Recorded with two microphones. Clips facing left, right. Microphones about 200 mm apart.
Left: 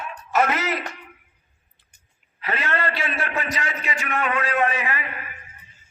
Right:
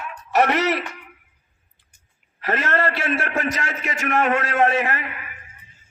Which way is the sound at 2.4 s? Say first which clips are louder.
Right 4 dB; 45° right (ahead or behind).